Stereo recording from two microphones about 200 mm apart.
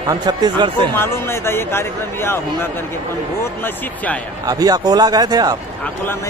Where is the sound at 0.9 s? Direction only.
10° left (ahead or behind).